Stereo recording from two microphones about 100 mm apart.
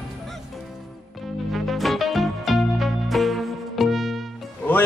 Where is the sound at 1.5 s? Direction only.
Centre (ahead or behind).